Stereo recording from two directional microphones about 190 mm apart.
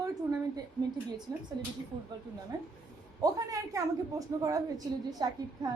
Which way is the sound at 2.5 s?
20° right (ahead or behind).